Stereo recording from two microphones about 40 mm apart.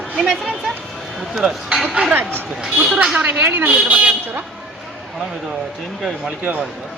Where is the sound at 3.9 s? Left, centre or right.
Right.